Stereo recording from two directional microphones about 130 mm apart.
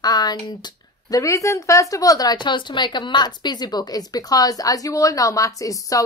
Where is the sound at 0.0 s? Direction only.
30° left (ahead or behind).